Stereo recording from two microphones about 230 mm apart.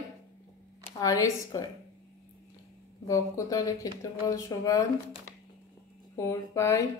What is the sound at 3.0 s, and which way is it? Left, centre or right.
Speech, centre.